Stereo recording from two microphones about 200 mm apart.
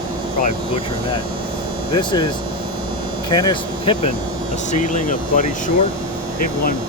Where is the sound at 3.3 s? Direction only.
20° left (ahead or behind).